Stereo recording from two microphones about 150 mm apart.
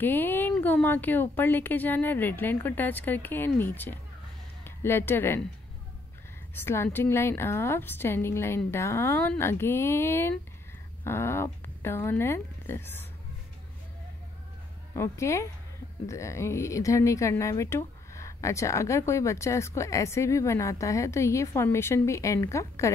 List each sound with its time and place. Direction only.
0.0 s a woman's voice: 15° left (ahead or behind)
6.5 s a woman's voice: 15° left (ahead or behind)
15.0 s speech: 20° left (ahead or behind)